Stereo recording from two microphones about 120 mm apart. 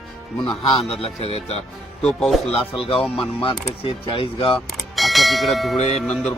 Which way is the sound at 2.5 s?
50° left (ahead or behind).